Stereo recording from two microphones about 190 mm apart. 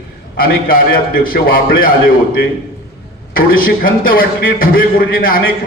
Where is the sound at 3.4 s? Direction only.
50° left (ahead or behind).